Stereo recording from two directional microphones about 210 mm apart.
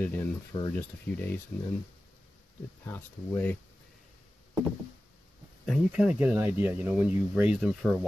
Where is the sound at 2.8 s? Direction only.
10° left (ahead or behind).